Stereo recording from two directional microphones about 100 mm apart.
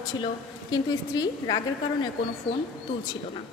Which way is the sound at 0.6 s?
40° left (ahead or behind).